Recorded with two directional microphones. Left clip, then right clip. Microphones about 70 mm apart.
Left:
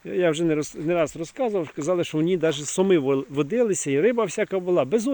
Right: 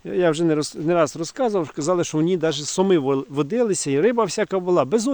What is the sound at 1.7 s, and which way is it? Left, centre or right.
Speech, right.